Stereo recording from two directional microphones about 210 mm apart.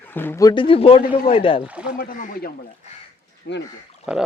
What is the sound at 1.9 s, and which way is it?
Speech, 45° left (ahead or behind).